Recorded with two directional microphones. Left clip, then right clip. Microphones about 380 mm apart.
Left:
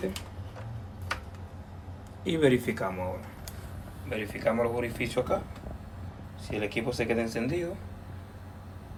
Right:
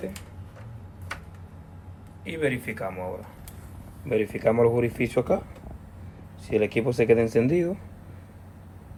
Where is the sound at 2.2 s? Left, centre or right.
Centre.